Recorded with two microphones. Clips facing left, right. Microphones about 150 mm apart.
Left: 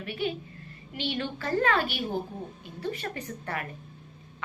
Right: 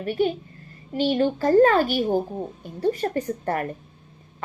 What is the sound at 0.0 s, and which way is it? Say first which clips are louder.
A woman's voice: right 9 dB; 40° right (ahead or behind).